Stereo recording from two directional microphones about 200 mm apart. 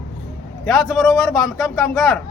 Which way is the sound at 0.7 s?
Centre (ahead or behind).